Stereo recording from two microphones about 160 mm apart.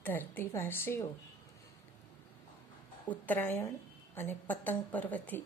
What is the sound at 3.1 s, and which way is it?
A woman's voice, 10° left (ahead or behind).